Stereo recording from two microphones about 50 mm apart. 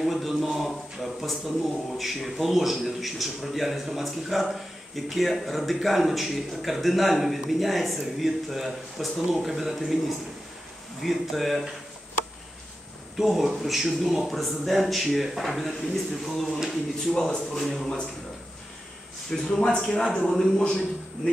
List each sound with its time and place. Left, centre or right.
0.0 s a sound: centre
0.3 s a man's voice: centre
13.2 s a man's voice: centre
19.3 s a man's voice: centre
20.2 s a man's voice: centre
20.5 s speech: left